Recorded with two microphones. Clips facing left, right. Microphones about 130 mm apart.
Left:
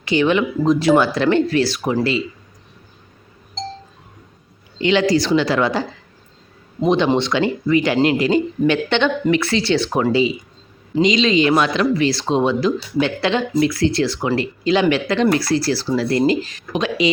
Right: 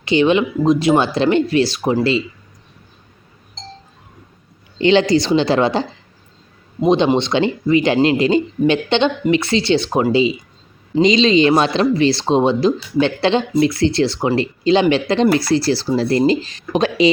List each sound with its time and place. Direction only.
0.0 s speech: 20° right (ahead or behind)
4.8 s speech: 30° right (ahead or behind)
6.8 s speech: 20° right (ahead or behind)